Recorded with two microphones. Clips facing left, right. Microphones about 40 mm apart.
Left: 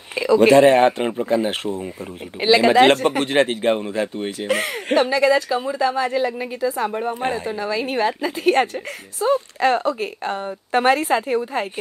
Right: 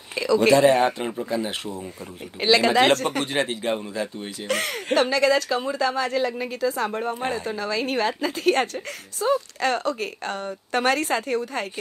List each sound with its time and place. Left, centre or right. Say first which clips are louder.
0.1 s speech: left 5 dB; left
0.5 s speech: left 4 dB; left
2.4 s a woman's voice: left 4 dB; centre
2.7 s speech: left 5 dB; left
3.3 s speech: left 7 dB; left
4.5 s a woman's voice: left 2 dB; centre